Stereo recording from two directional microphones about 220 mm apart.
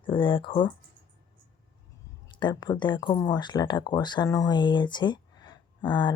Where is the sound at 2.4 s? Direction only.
20° left (ahead or behind).